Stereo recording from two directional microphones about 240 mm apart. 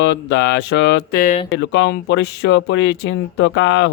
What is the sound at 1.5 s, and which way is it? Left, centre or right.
Speech, left.